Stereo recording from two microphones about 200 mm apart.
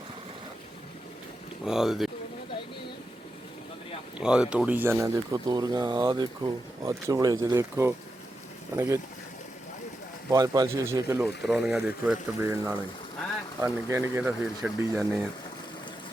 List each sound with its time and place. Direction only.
1.6 s speech: centre (ahead or behind)
4.2 s speech: 5° right (ahead or behind)
10.2 s speech: 20° right (ahead or behind)
11.4 s speech: 5° right (ahead or behind)
12.4 s speech: 15° right (ahead or behind)